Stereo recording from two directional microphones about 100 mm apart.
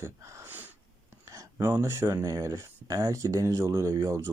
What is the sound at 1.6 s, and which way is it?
Speech, 25° right (ahead or behind).